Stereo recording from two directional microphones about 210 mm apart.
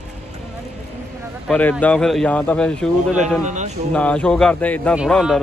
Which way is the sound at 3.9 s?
5° left (ahead or behind).